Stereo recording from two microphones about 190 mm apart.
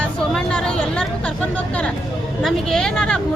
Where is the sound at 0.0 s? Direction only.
5° left (ahead or behind).